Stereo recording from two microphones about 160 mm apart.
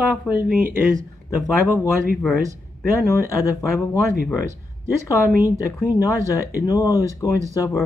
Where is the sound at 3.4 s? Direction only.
20° left (ahead or behind).